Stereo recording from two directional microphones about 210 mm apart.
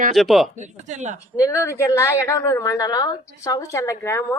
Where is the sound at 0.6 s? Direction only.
35° right (ahead or behind).